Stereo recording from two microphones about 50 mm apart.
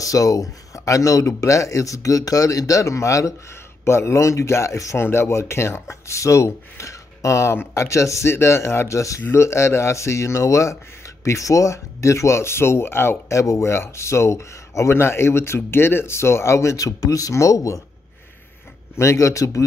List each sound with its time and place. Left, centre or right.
0.1 s speech: left
3.8 s speech: left
5.0 s speech: left
9.3 s speech: left
13.3 s speech: left
18.9 s speech: left